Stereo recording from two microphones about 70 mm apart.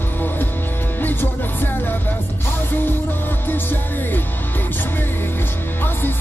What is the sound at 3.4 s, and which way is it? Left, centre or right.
Music, left.